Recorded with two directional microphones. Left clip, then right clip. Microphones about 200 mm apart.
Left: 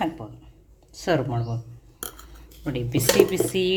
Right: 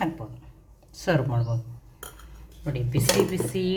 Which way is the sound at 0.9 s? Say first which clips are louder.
Left 2 dB; 10° left (ahead or behind).